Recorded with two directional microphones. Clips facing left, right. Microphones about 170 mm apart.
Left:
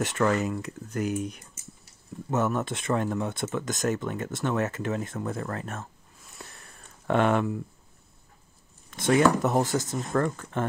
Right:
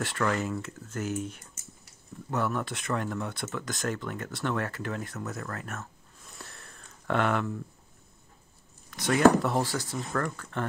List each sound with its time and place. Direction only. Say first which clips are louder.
0.0 s speech: left 4 dB; 20° left (ahead or behind)
6.4 s sniff: left 2 dB; 15° left (ahead or behind)
7.1 s speech: left 4 dB; 20° left (ahead or behind)
8.9 s speech: even; 25° left (ahead or behind)